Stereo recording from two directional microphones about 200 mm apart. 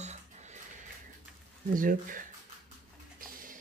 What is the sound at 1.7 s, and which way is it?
Speech, 45° right (ahead or behind).